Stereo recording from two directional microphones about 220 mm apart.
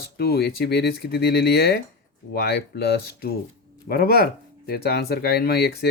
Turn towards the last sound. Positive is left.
turn(degrees=45)  # may be behind; listen again after turning